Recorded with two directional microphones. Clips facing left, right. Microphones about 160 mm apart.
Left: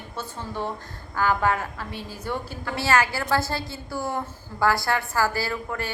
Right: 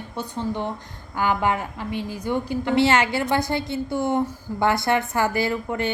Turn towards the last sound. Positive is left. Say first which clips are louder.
# right 5 dB
turn(degrees=-20)  # may be behind; listen again after turning